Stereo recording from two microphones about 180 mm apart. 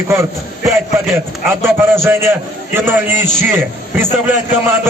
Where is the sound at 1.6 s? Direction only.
15° right (ahead or behind).